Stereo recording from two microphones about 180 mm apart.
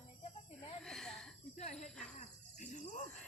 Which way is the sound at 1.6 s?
35° left (ahead or behind).